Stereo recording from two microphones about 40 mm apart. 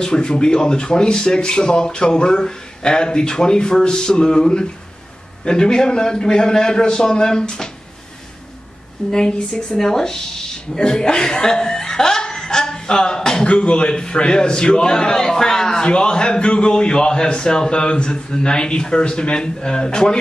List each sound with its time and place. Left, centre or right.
0.0 s a man's voice: centre
9.1 s speech: centre
15.8 s speech: left